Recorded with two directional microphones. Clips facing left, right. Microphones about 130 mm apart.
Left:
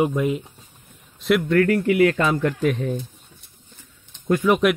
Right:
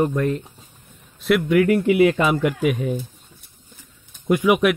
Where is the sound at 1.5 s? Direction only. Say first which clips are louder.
Right 3 dB; 15° right (ahead or behind).